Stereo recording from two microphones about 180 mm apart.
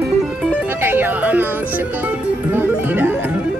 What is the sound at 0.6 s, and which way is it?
Music, 10° right (ahead or behind).